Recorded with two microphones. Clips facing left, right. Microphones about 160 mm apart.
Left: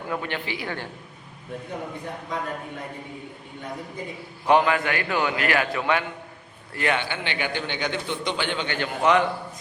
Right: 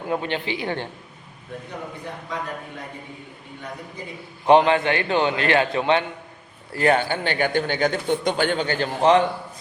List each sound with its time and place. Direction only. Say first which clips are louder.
0.1 s a man's voice: right 5 dB; 25° right (ahead or behind)
4.4 s a man's voice: right 4 dB; 25° right (ahead or behind)
6.7 s a man's voice: right 6 dB; 40° right (ahead or behind)